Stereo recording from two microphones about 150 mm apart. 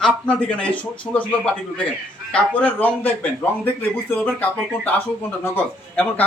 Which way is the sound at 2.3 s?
10° left (ahead or behind).